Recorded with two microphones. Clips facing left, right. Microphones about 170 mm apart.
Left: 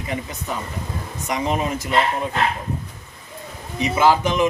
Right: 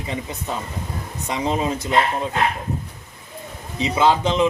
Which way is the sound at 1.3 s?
25° right (ahead or behind).